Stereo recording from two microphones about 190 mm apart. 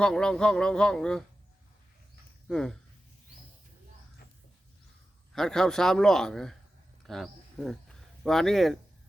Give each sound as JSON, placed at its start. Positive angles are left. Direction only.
{"t": 0.0, "sound": "a man's voice", "side_deg": 5}
{"t": 2.5, "sound": "a man's voice", "side_deg": 5}
{"t": 5.3, "sound": "a man's voice", "side_deg": 0}